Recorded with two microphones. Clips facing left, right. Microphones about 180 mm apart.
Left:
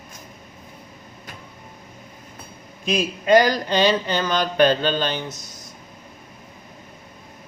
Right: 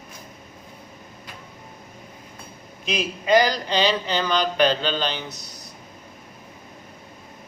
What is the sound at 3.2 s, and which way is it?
Mantra, 50° left (ahead or behind).